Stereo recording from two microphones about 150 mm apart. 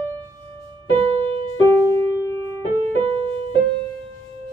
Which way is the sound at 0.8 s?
40° right (ahead or behind).